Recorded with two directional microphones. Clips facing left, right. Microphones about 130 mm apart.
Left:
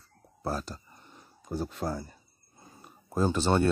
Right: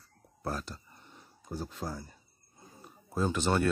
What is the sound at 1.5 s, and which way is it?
Speech, 65° left (ahead or behind).